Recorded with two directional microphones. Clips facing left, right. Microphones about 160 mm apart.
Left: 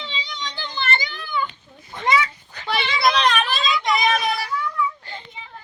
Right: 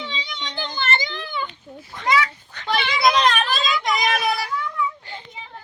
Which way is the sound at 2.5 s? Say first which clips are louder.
Right 1 dB; 5° left (ahead or behind).